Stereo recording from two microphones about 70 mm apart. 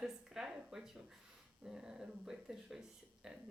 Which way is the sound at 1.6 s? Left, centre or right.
Centre.